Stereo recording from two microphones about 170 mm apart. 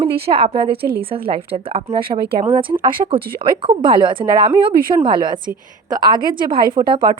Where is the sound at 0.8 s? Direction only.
65° right (ahead or behind).